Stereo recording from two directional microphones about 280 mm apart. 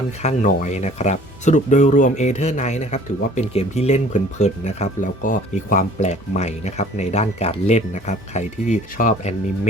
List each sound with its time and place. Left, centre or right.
0.2 s speech: left